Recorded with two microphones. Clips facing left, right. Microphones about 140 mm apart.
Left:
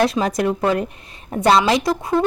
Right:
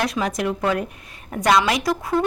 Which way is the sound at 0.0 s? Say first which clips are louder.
Left 5 dB; 30° left (ahead or behind).